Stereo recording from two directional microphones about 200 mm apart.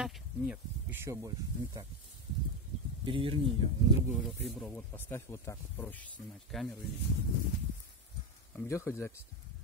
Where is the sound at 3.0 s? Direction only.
25° right (ahead or behind).